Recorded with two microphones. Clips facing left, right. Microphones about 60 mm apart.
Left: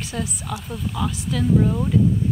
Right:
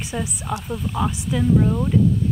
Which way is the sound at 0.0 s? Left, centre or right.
Centre.